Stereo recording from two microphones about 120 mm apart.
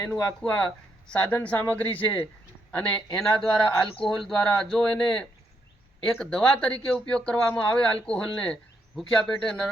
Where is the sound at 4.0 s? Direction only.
5° left (ahead or behind).